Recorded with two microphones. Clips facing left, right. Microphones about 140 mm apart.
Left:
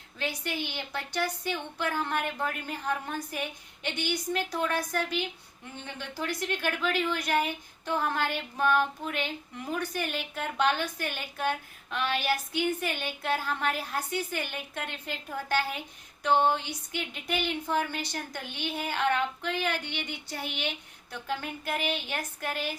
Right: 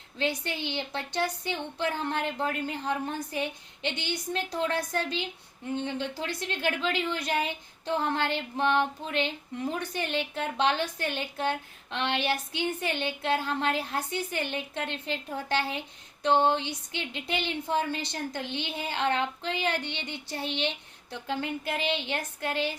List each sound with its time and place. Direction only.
0.2 s a woman's voice: 20° right (ahead or behind)